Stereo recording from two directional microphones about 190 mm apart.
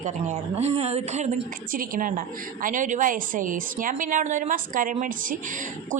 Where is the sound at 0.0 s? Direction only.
35° right (ahead or behind).